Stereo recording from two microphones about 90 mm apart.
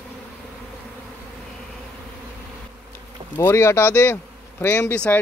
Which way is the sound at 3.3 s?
30° left (ahead or behind).